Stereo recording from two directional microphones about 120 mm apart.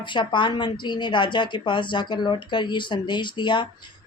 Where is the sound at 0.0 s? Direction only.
40° left (ahead or behind).